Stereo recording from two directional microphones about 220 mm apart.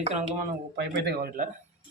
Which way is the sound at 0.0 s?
30° right (ahead or behind).